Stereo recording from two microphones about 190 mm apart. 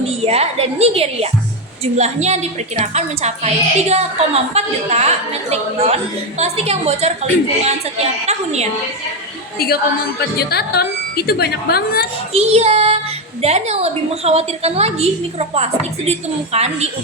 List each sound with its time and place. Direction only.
0.3 s a woman's voice: 30° right (ahead or behind)
10.2 s a woman's voice: 55° left (ahead or behind)
12.3 s a woman's voice: 35° right (ahead or behind)